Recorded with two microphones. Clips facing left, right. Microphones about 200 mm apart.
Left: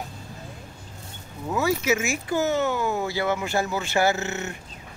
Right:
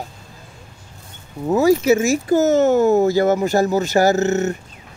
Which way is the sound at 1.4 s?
40° right (ahead or behind).